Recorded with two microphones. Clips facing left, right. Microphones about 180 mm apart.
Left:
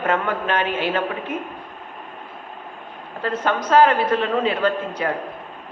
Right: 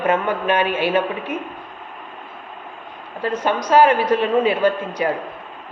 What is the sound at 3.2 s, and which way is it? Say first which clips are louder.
A man's voice: right 2 dB; 15° right (ahead or behind).